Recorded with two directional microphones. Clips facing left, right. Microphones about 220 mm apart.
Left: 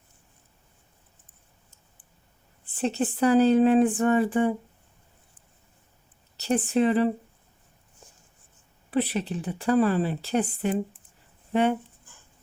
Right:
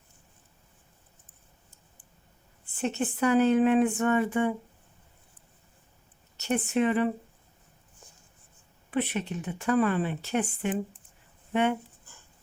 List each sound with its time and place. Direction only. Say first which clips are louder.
2.7 s speech: left 3 dB; 35° left (ahead or behind)
6.3 s speech: left 3 dB; 35° left (ahead or behind)
8.9 s speech: left 3 dB; 35° left (ahead or behind)